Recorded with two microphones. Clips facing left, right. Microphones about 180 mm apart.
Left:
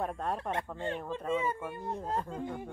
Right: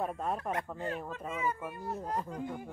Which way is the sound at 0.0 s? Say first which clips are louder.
Even; centre (ahead or behind).